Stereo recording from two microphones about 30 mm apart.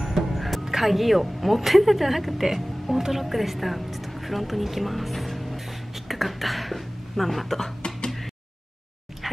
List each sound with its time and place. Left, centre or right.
0.0 s music: centre
0.7 s speech: centre
6.0 s a sound: centre